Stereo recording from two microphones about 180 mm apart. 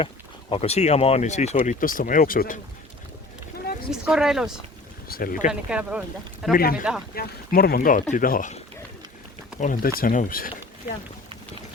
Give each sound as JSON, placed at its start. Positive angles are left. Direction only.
{"t": 0.5, "sound": "speech", "side_deg": 35}
{"t": 4.0, "sound": "speech", "side_deg": -5}
{"t": 5.0, "sound": "speech", "side_deg": 55}
{"t": 5.5, "sound": "speech", "side_deg": -5}
{"t": 6.6, "sound": "speech", "side_deg": 55}